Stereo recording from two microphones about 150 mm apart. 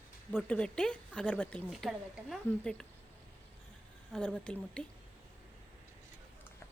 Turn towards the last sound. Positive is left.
turn(degrees=5)  # may be behind; listen again after turning